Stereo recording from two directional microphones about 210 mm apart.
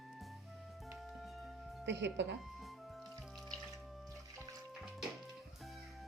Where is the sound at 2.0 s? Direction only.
55° right (ahead or behind).